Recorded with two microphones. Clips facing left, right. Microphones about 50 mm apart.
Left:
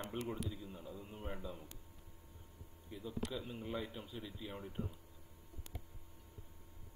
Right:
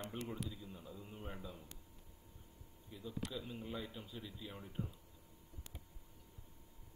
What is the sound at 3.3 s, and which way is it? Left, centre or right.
Speech, centre.